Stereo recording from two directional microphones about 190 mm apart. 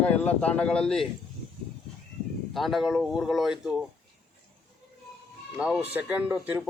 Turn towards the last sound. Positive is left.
turn(degrees=-10)  # may be behind; listen again after turning